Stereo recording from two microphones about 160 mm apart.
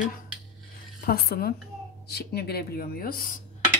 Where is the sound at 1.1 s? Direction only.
70° left (ahead or behind).